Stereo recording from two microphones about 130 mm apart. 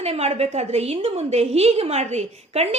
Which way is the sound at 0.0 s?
55° right (ahead or behind).